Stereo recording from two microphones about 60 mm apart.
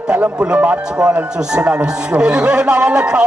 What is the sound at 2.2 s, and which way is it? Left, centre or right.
Speech, centre.